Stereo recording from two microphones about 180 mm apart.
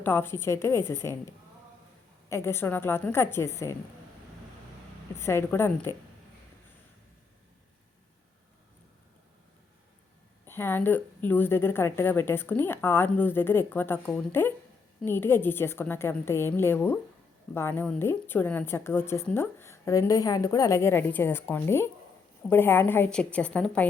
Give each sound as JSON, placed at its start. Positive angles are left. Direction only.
{"t": 0.0, "sound": "a woman's voice", "side_deg": 10}
{"t": 2.3, "sound": "a woman's voice", "side_deg": 15}
{"t": 5.1, "sound": "a woman's voice", "side_deg": 15}
{"t": 10.4, "sound": "a woman's voice", "side_deg": 10}